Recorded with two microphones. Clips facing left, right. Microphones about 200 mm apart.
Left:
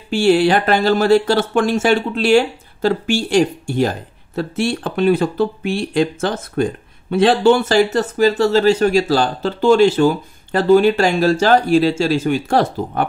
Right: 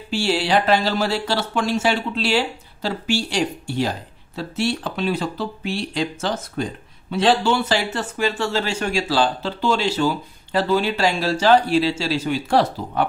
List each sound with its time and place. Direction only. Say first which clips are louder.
0.1 s speech: left 7 dB; 55° left (ahead or behind)